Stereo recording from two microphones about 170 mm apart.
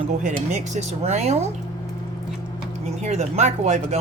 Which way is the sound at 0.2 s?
45° right (ahead or behind).